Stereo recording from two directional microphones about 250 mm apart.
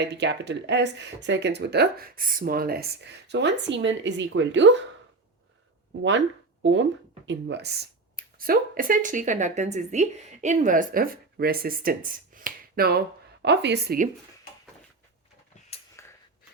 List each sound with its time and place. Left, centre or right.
0.0 s speech: right
6.6 s speech: right
16.0 s a sound: centre